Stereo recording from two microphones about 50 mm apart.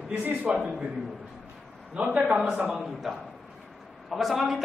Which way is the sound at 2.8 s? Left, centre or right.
Centre.